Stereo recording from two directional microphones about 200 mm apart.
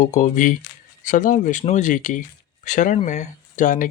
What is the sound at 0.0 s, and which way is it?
Speech, 40° left (ahead or behind).